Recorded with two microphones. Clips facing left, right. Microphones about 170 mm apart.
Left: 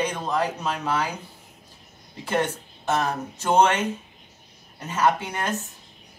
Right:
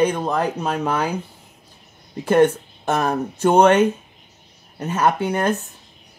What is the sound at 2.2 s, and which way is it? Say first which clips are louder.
Speech: right 10 dB; 55° right (ahead or behind).